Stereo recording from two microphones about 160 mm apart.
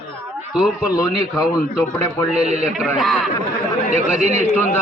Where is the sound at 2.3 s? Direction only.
45° right (ahead or behind).